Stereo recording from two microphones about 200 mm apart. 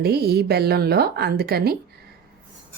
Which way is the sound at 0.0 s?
50° right (ahead or behind).